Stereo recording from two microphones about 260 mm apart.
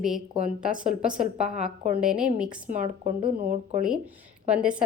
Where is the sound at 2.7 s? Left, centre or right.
Right.